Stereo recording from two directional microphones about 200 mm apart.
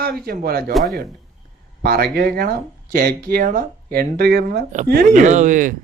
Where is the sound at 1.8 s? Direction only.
50° right (ahead or behind).